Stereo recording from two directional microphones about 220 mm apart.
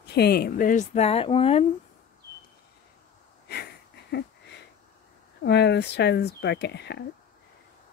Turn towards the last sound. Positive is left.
turn(degrees=50)  # may be behind; listen again after turning